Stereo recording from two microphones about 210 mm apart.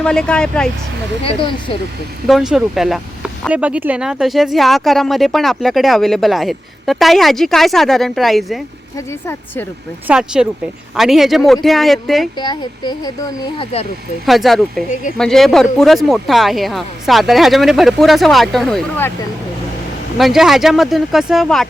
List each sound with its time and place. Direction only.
0.0 s speech: 5° left (ahead or behind)
1.2 s speech: 25° left (ahead or behind)
2.2 s speech: centre (ahead or behind)
9.0 s a woman's voice: 10° left (ahead or behind)
10.1 s speech: 5° right (ahead or behind)
12.4 s speech: 20° left (ahead or behind)
14.3 s speech: centre (ahead or behind)
20.1 s speech: centre (ahead or behind)